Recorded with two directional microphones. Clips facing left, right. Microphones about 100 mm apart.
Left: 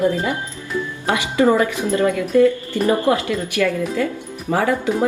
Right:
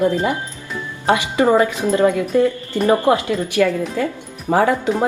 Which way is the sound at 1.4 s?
20° right (ahead or behind).